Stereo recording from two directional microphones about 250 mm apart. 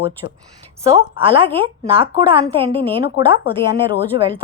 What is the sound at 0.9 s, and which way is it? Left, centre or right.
A woman's voice, right.